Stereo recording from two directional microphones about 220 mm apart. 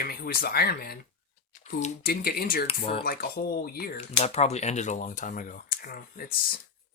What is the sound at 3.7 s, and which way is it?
Speech, 45° left (ahead or behind).